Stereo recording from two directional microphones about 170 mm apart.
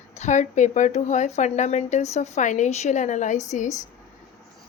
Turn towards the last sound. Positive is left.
turn(degrees=45)  # may be behind; listen again after turning